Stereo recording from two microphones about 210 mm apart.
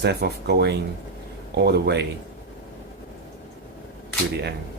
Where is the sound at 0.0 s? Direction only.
50° right (ahead or behind).